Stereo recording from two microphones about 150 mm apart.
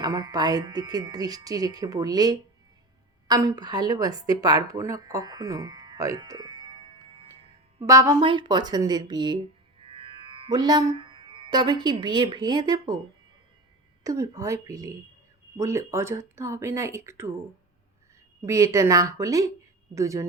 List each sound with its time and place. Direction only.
0.0 s a woman's voice: 25° right (ahead or behind)
7.9 s speech: 20° right (ahead or behind)
8.2 s speech: 30° right (ahead or behind)
14.0 s speech: 20° right (ahead or behind)
18.4 s speech: 20° right (ahead or behind)